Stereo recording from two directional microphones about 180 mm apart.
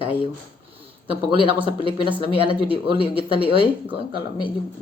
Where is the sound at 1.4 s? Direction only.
30° right (ahead or behind).